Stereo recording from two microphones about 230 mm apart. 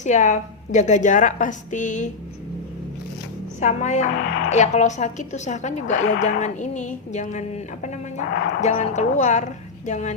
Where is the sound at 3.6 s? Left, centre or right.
Left.